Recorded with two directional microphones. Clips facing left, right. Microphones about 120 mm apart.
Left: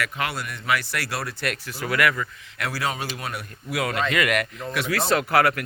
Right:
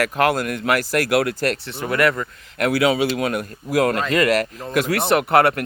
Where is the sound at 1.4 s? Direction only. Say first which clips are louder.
Right 6 dB; 35° right (ahead or behind).